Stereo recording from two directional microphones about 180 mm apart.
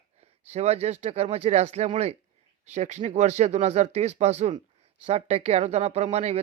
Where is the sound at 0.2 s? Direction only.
35° right (ahead or behind).